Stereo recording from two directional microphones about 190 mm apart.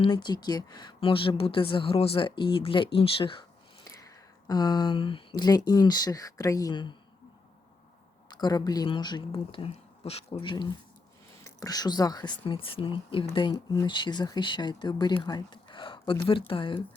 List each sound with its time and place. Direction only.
0.0 s speech: 25° left (ahead or behind)
8.3 s speech: 20° left (ahead or behind)